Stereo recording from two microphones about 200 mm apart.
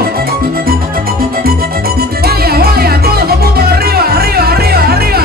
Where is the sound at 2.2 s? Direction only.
50° right (ahead or behind).